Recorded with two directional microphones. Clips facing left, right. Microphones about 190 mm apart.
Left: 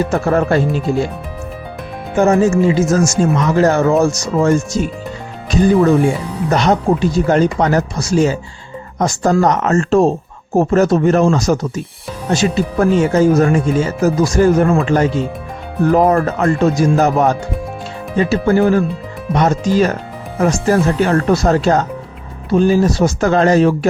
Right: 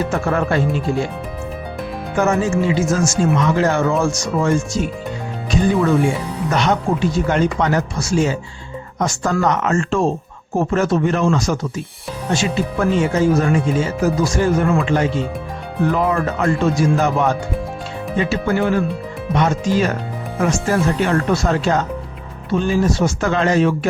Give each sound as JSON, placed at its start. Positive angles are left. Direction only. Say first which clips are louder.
{"t": 0.1, "sound": "speech", "louder": "left 4 dB", "side_deg": 40}
{"t": 2.1, "sound": "speech", "louder": "left 5 dB", "side_deg": 35}